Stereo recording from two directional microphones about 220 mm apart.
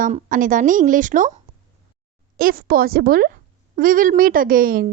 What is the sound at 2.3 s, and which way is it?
A woman's voice, 40° right (ahead or behind).